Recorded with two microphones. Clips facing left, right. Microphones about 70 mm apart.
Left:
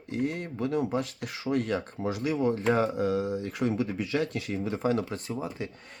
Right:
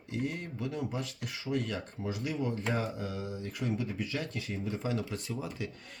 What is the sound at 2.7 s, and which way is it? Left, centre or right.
Speech, left.